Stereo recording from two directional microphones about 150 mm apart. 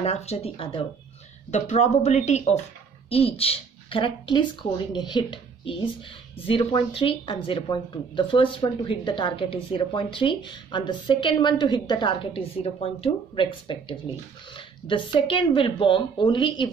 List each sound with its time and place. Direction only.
0.0 s speech: 45° left (ahead or behind)
1.5 s speech: 50° left (ahead or behind); by 16.7 s 30° left (ahead or behind)